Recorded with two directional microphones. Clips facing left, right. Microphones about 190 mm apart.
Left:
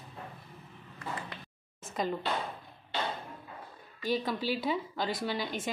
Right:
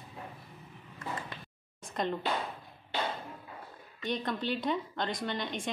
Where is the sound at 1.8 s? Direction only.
Centre (ahead or behind).